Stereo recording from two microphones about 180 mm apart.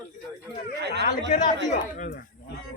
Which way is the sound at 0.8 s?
70° right (ahead or behind).